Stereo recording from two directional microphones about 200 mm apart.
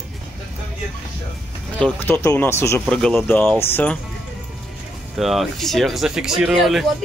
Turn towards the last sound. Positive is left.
turn(degrees=0)  # may be behind; listen again after turning